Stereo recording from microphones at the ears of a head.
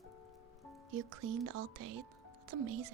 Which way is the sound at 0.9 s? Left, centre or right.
Right.